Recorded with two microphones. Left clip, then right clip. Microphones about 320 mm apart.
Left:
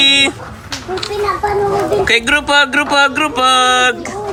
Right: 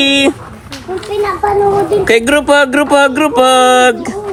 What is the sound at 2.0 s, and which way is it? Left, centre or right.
Speech, centre.